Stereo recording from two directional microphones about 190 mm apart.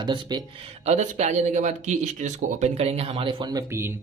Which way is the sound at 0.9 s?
35° right (ahead or behind).